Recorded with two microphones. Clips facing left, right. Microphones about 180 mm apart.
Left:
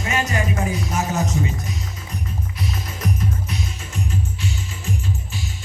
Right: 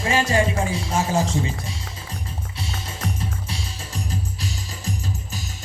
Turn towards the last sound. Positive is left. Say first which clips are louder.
# left 2 dB
turn(degrees=-35)  # may be behind; listen again after turning